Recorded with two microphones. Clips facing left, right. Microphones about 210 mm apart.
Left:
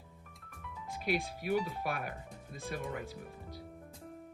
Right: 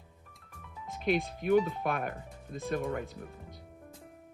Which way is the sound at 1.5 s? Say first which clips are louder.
Right 7 dB; 50° right (ahead or behind).